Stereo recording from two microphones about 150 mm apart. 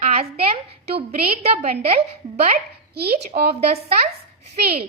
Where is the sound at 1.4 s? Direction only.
45° right (ahead or behind).